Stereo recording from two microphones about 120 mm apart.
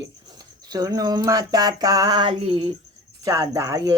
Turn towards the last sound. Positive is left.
turn(degrees=-30)  # may be behind; listen again after turning